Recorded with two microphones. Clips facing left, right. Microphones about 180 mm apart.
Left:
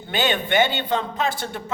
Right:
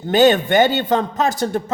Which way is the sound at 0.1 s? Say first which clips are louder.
Right 9 dB; 40° right (ahead or behind).